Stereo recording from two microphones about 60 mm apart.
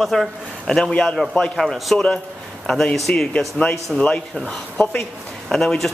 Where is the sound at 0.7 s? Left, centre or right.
Centre.